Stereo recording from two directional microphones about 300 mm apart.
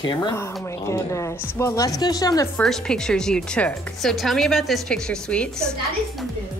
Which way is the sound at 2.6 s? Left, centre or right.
Centre.